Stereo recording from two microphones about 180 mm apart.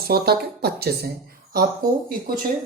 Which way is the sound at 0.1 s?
60° right (ahead or behind).